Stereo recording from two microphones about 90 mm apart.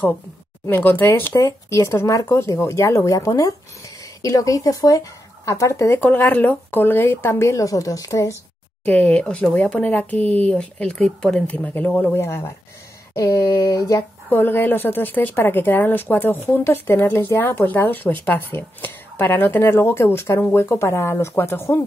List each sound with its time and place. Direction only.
0.7 s speech: 20° left (ahead or behind)
1.3 s speech: 35° left (ahead or behind)
6.0 s speech: 20° left (ahead or behind); by 8.4 s 35° left (ahead or behind)
8.8 s speech: 15° left (ahead or behind); by 14.0 s 35° left (ahead or behind)
14.3 s speech: 20° left (ahead or behind)